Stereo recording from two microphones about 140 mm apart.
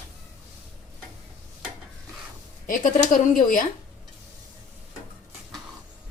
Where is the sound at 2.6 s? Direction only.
70° left (ahead or behind).